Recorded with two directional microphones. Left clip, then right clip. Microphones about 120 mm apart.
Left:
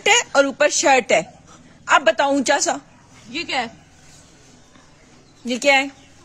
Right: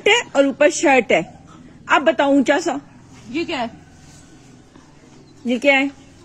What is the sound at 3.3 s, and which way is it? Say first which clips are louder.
Speech: even; 90° left.